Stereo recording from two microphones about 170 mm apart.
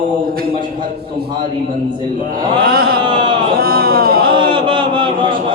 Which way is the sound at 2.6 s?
60° right (ahead or behind).